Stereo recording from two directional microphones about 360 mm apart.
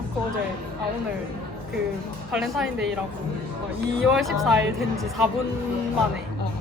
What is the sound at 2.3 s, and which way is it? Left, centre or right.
Speech, centre.